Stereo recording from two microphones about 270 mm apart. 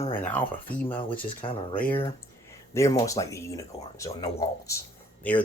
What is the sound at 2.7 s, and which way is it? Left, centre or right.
Speech, centre.